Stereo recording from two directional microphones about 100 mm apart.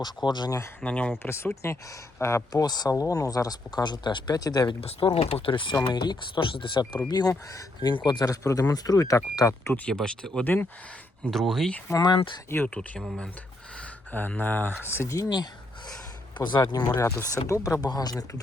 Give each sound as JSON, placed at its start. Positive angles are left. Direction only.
{"t": 0.3, "sound": "speech", "side_deg": 45}
{"t": 0.9, "sound": "speech", "side_deg": 15}
{"t": 1.2, "sound": "speech", "side_deg": 25}
{"t": 4.8, "sound": "speech", "side_deg": 75}
{"t": 5.7, "sound": "speech", "side_deg": 45}
{"t": 7.1, "sound": "speech", "side_deg": 40}
{"t": 9.7, "sound": "speech", "side_deg": 10}
{"t": 10.4, "sound": "speech", "side_deg": 20}
{"t": 11.3, "sound": "speech", "side_deg": 5}
{"t": 11.9, "sound": "speech", "side_deg": 50}
{"t": 12.6, "sound": "speech", "side_deg": 10}
{"t": 16.4, "sound": "speech", "side_deg": 45}